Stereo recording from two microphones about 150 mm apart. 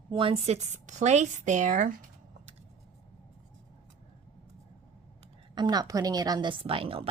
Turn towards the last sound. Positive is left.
turn(degrees=-35)  # may be behind; listen again after turning